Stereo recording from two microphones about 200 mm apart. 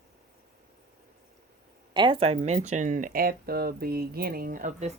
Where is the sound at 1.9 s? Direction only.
25° right (ahead or behind); by 4.9 s 40° right (ahead or behind).